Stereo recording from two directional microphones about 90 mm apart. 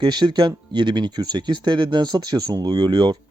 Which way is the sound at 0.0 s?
55° right (ahead or behind).